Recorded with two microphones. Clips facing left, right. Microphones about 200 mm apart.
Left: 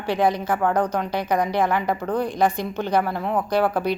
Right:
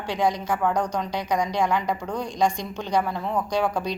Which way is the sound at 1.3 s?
55° left (ahead or behind).